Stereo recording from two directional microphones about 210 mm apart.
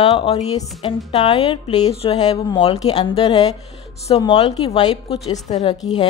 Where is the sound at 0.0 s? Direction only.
30° left (ahead or behind).